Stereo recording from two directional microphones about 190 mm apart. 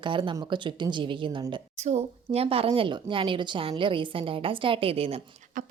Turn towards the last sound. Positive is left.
turn(degrees=-45)  # may be behind; listen again after turning